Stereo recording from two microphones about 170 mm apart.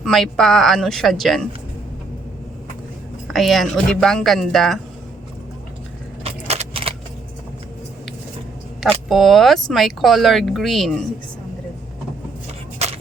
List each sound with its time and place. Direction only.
0.0 s speech: centre (ahead or behind)
3.2 s speech: centre (ahead or behind)
6.2 s keys jangling: 40° right (ahead or behind)
8.8 s speech: centre (ahead or behind)